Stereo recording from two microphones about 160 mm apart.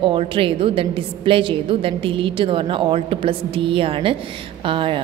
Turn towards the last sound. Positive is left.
turn(degrees=-30)  # may be behind; listen again after turning